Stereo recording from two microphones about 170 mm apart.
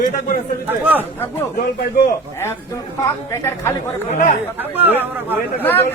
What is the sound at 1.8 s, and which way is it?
Speech, 60° left (ahead or behind).